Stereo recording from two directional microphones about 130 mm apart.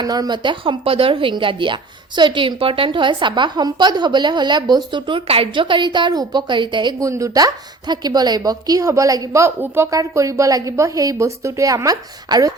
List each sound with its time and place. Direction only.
0.0 s a woman's voice: 30° right (ahead or behind)
7.0 s a woman's voice: 25° right (ahead or behind)